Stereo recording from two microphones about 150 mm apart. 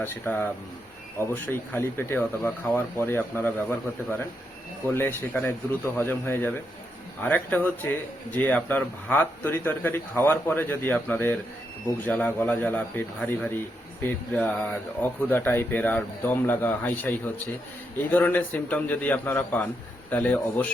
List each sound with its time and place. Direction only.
0.0 s speech: 15° left (ahead or behind)
4.9 s speech: 15° left (ahead or behind)